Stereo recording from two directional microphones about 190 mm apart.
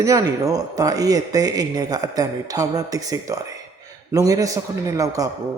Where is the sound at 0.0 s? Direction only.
20° right (ahead or behind).